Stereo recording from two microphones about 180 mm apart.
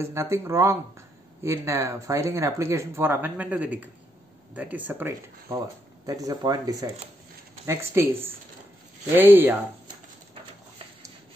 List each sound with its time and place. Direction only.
0.0 s speech: 15° right (ahead or behind)